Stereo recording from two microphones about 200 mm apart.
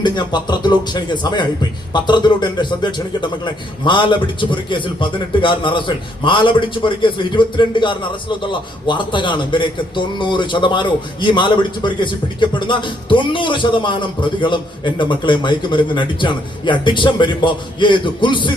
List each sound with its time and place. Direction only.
0.0 s a man's voice: 20° left (ahead or behind)